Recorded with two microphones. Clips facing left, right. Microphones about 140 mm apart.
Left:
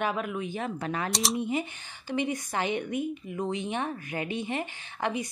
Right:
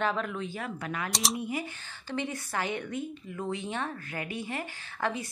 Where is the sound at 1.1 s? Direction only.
Centre (ahead or behind).